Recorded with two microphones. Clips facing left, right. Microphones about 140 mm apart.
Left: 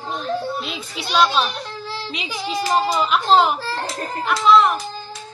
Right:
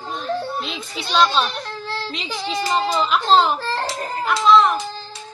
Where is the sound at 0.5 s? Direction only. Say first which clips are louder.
Even; 5° left (ahead or behind).